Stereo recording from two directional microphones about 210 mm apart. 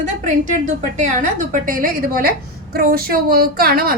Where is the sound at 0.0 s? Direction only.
35° right (ahead or behind).